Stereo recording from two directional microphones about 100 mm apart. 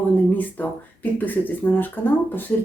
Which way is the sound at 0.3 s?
15° left (ahead or behind).